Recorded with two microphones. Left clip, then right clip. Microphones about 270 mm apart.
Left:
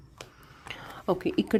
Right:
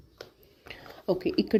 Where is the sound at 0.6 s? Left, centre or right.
Centre.